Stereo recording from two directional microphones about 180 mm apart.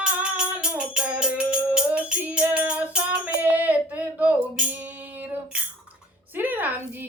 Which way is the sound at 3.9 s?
10° right (ahead or behind).